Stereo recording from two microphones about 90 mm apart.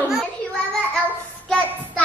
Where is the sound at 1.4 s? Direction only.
10° left (ahead or behind).